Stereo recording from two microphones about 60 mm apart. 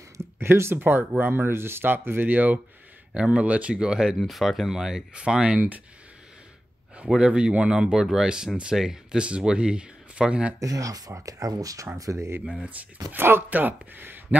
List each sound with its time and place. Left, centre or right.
0.2 s speech: right; by 5.8 s centre
7.2 s speech: centre
10.6 s speech: right
12.4 s speech: right
13.1 s speech: right